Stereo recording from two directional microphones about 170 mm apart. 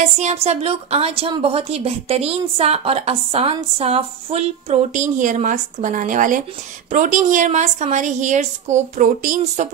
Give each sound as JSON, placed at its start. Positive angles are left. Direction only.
{"t": 0.2, "sound": "a woman's voice", "side_deg": -40}